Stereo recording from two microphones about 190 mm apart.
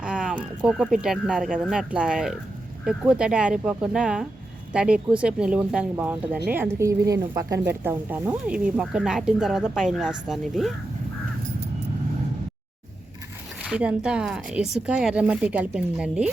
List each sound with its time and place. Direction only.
0.0 s a sound: 5° right (ahead or behind)
1.0 s speech: centre (ahead or behind)
13.6 s speech: 5° right (ahead or behind)